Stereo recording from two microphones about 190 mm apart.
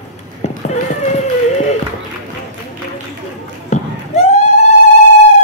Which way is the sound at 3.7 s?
35° left (ahead or behind).